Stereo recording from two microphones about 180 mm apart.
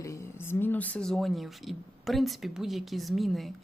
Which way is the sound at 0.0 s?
15° left (ahead or behind).